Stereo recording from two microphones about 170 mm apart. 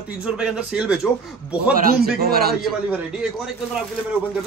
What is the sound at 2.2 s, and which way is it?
Speech, 65° right (ahead or behind).